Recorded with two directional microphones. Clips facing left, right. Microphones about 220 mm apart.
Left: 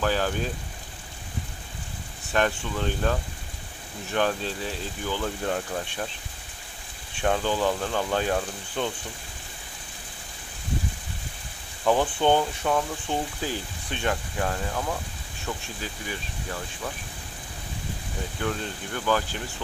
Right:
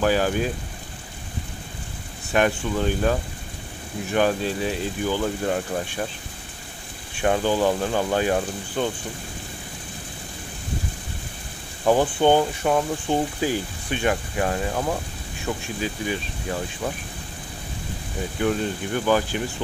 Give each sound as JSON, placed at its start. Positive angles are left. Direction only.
{"t": 0.0, "sound": "speech", "side_deg": -10}
{"t": 2.3, "sound": "speech", "side_deg": -10}
{"t": 7.2, "sound": "speech", "side_deg": -10}
{"t": 11.8, "sound": "speech", "side_deg": -15}
{"t": 14.7, "sound": "speech", "side_deg": -30}
{"t": 15.5, "sound": "speech", "side_deg": -15}
{"t": 18.4, "sound": "speech", "side_deg": -15}